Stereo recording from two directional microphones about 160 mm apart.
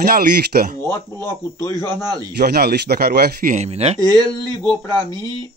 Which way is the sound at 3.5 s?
45° right (ahead or behind).